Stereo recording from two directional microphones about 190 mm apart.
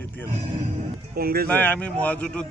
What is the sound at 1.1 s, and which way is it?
Speech, 55° right (ahead or behind).